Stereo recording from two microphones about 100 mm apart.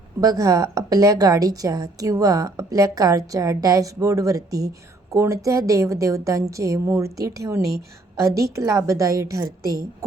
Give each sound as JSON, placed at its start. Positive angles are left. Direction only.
{"t": 0.2, "sound": "a woman's voice", "side_deg": -35}